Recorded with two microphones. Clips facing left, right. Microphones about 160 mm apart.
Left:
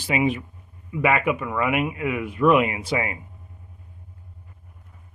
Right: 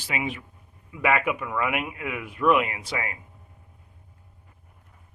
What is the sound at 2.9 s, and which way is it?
Speech, 15° left (ahead or behind).